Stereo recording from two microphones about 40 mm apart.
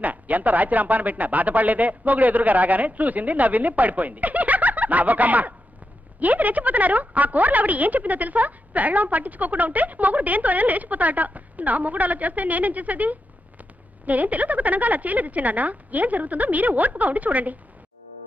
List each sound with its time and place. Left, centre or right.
0.0 s a woman's voice: right